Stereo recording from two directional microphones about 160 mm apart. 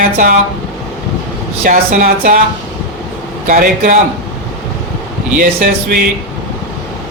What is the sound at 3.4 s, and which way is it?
Speech, 55° right (ahead or behind).